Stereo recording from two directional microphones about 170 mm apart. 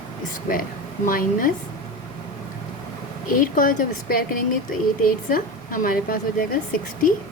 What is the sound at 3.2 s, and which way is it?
Speech, 55° left (ahead or behind).